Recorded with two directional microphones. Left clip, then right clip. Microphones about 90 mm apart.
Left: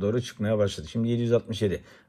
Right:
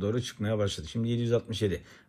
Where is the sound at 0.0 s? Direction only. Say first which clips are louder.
Left 4 dB; 30° right (ahead or behind).